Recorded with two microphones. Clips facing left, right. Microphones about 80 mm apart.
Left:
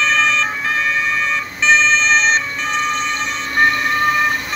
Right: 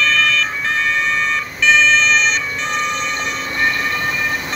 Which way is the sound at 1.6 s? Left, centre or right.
Left.